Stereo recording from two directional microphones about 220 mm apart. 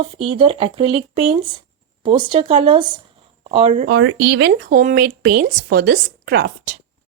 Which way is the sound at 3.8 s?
50° right (ahead or behind).